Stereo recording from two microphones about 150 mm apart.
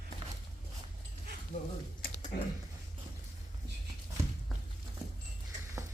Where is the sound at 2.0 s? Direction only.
80° left.